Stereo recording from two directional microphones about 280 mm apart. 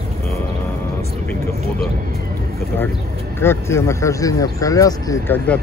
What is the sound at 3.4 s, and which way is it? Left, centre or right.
Speech, centre.